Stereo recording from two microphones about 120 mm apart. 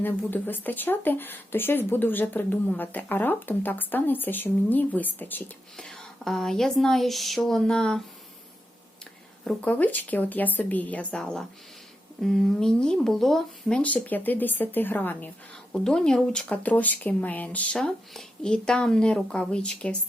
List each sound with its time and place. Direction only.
0.0 s speech: 15° left (ahead or behind)
5.7 s speech: 5° left (ahead or behind)
9.4 s speech: 10° left (ahead or behind)